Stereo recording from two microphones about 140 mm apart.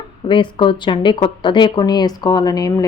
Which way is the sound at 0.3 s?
35° left (ahead or behind).